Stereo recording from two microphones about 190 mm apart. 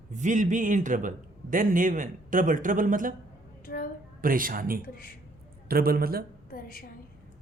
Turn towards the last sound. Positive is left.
turn(degrees=50)  # may be behind; listen again after turning